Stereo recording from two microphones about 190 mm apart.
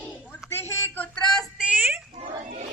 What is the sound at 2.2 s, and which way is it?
Children playing, 40° right (ahead or behind).